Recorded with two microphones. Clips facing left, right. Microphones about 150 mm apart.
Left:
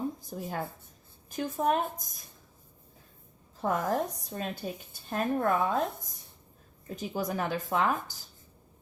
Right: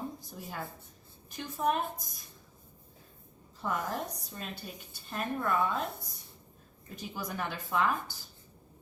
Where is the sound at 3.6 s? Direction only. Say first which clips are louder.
Left 6 dB; 50° left (ahead or behind).